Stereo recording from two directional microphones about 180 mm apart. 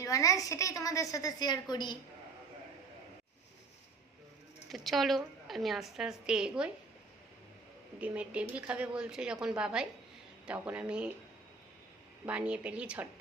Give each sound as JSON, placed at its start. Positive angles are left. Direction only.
{"t": 0.0, "sound": "a woman's voice", "side_deg": 15}
{"t": 4.7, "sound": "a woman's voice", "side_deg": 0}
{"t": 7.9, "sound": "a woman's voice", "side_deg": -5}
{"t": 12.2, "sound": "speech", "side_deg": -5}